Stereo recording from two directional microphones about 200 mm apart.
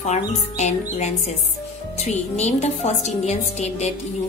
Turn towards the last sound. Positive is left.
turn(degrees=35)  # may be behind; listen again after turning